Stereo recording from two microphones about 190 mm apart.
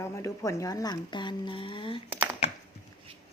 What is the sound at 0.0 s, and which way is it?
Speech, 15° left (ahead or behind).